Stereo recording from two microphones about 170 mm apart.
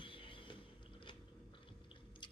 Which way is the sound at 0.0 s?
30° left (ahead or behind).